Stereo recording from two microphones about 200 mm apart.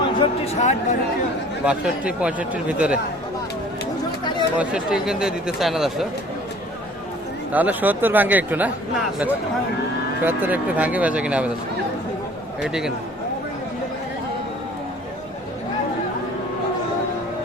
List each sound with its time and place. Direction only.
0.2 s a sound: 30° left (ahead or behind)
1.6 s speech: 5° right (ahead or behind)
4.2 s chatter: 20° left (ahead or behind)
4.5 s speech: 5° right (ahead or behind)
7.5 s speech: 10° right (ahead or behind)
10.2 s speech: 10° right (ahead or behind)
12.6 s speech: 5° right (ahead or behind)